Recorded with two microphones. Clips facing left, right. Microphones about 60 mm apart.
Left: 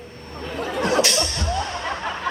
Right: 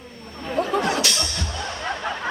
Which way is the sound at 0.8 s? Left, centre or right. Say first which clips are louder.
Left 3 dB; left.